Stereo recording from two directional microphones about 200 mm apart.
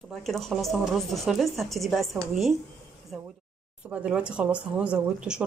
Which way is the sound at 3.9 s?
5° right (ahead or behind).